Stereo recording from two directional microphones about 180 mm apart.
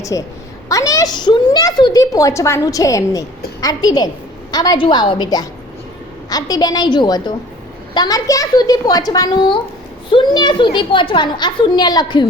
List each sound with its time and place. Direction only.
0.0 s a woman's voice: 20° left (ahead or behind)